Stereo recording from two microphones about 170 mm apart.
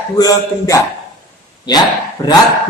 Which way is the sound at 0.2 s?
20° left (ahead or behind).